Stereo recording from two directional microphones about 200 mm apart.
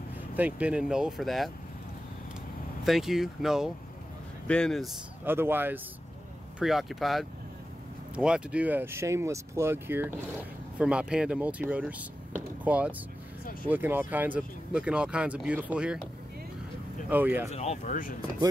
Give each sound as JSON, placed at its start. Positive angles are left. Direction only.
{"t": 0.4, "sound": "speech", "side_deg": -5}
{"t": 2.8, "sound": "speech", "side_deg": 0}
{"t": 5.2, "sound": "speech", "side_deg": -10}
{"t": 17.1, "sound": "speech", "side_deg": -10}
{"t": 17.5, "sound": "speech", "side_deg": 35}